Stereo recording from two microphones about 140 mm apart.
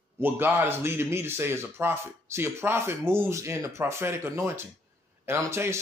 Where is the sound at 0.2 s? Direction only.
15° right (ahead or behind).